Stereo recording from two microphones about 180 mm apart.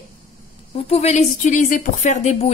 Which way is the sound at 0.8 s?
35° left (ahead or behind).